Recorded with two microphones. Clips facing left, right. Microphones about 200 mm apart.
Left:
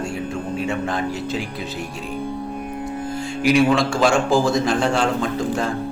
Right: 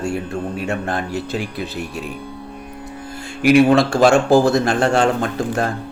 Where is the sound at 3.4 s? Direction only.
60° right (ahead or behind).